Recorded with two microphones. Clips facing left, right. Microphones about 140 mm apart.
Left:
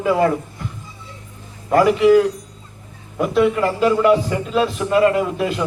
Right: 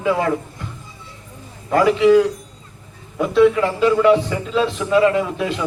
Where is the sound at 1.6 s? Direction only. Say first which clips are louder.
Left 1 dB; 5° left (ahead or behind).